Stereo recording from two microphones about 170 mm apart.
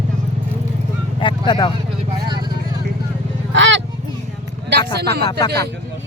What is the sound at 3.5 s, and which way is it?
Speech, 90° right.